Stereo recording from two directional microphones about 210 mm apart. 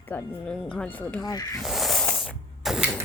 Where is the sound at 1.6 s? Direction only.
Centre (ahead or behind).